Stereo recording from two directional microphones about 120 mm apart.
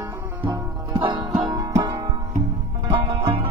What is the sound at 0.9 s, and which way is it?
Music, 40° right (ahead or behind).